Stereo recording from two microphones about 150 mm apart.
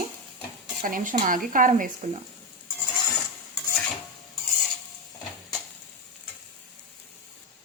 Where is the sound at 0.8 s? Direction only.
60° right (ahead or behind).